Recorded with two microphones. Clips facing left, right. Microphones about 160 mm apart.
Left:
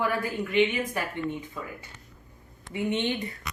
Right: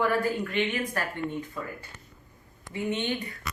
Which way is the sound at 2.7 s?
20° left (ahead or behind).